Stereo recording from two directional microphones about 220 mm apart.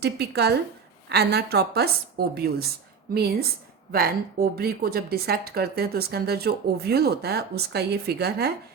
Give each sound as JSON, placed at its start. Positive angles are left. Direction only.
{"t": 0.0, "sound": "a woman's voice", "side_deg": -50}
{"t": 3.9, "sound": "a woman's voice", "side_deg": -45}